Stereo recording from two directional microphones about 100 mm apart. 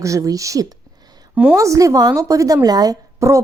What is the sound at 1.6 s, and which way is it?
Speech, 35° right (ahead or behind).